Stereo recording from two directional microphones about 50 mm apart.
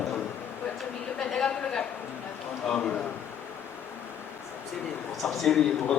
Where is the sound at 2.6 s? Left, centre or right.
Centre.